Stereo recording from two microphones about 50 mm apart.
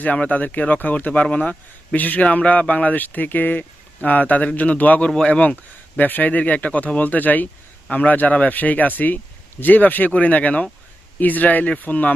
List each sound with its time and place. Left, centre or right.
0.0 s speech: left
5.0 s speech: centre
6.0 s speech: left